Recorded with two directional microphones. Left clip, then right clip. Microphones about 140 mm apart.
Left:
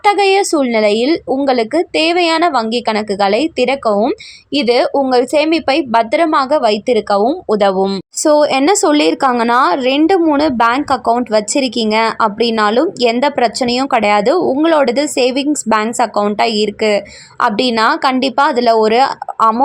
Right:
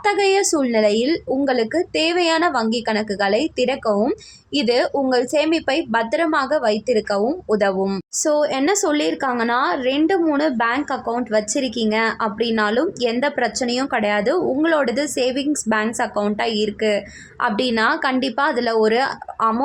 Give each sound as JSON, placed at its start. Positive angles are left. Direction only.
{"t": 0.0, "sound": "speech", "side_deg": 15}
{"t": 8.2, "sound": "a woman's voice", "side_deg": 35}